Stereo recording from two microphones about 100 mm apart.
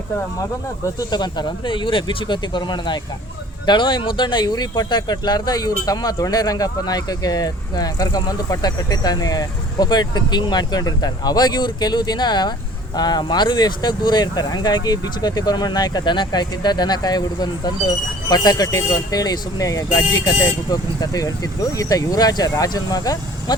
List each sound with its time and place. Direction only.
0.9 s speech: 45° left (ahead or behind)